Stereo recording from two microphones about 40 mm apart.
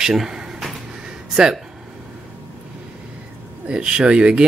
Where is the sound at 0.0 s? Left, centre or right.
Centre.